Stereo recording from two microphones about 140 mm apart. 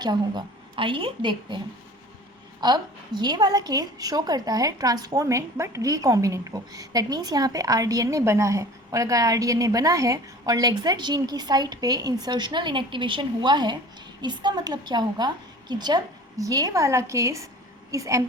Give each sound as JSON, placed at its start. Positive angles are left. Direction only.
{"t": 0.0, "sound": "a woman's voice", "side_deg": -30}